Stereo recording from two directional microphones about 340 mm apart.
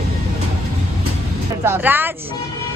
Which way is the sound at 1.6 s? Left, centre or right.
Centre.